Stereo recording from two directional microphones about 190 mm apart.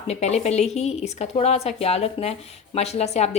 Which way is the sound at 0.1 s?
35° left (ahead or behind).